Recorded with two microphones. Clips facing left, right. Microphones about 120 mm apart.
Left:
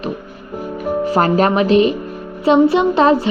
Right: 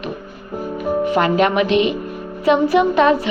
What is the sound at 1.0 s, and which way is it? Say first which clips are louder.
A woman's voice: left 2 dB; 35° left (ahead or behind).